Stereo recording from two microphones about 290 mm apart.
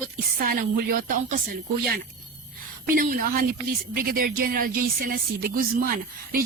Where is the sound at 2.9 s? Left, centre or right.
Right.